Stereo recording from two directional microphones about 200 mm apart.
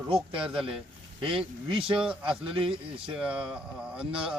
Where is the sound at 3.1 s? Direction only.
5° right (ahead or behind).